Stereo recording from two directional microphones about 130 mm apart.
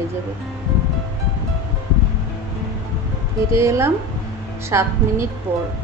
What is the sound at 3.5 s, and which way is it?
A woman's voice, 20° right (ahead or behind).